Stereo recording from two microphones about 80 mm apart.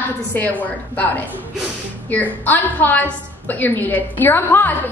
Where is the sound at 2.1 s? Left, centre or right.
Left.